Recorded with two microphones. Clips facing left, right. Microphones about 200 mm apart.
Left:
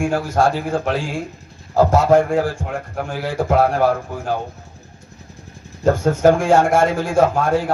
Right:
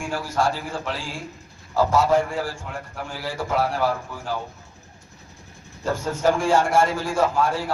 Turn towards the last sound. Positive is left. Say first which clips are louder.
# left 5 dB
turn(degrees=50)  # may be behind; listen again after turning